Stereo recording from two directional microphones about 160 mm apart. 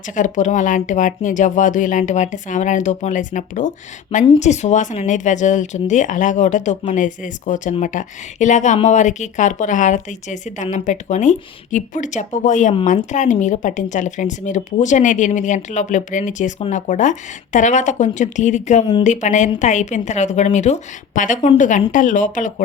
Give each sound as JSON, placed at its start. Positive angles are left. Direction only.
{"t": 0.1, "sound": "speech", "side_deg": 50}